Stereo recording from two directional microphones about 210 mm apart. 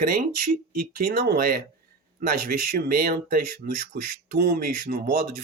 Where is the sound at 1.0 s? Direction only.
50° right (ahead or behind).